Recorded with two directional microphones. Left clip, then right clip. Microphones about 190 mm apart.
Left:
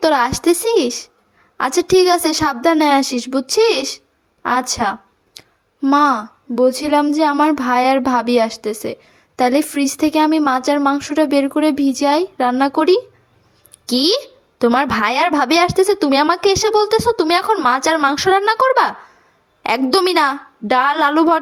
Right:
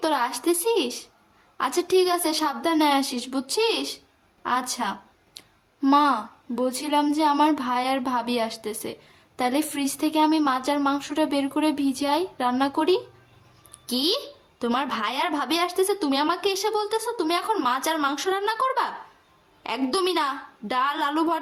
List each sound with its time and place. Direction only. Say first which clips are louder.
0.0 s a woman's voice: left 9 dB; 35° left (ahead or behind)
5.4 s a sound: left 6 dB; 35° left (ahead or behind)
5.8 s a woman's voice: left 6 dB; 25° left (ahead or behind)